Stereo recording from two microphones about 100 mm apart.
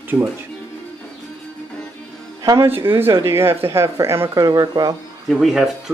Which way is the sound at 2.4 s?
35° right (ahead or behind).